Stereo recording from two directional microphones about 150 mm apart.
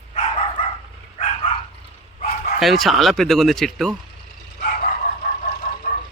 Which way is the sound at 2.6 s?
Centre (ahead or behind).